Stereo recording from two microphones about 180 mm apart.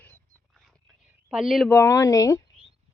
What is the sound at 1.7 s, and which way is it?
Speech, 15° left (ahead or behind).